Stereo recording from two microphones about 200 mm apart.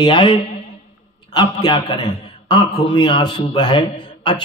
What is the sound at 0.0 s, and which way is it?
A man's voice, 25° left (ahead or behind).